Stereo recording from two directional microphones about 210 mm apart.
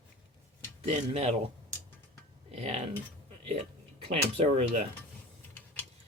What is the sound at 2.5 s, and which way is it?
Cutlery, 30° right (ahead or behind).